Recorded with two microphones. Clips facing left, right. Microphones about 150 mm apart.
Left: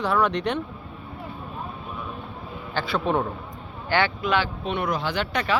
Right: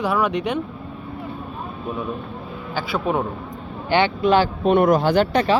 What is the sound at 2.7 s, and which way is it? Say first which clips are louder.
Speech: right 2 dB; 10° right (ahead or behind).